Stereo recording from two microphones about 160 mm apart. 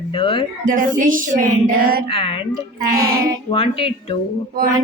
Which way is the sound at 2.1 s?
35° left (ahead or behind).